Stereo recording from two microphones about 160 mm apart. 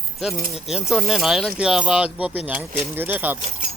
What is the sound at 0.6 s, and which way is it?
Speech, centre (ahead or behind).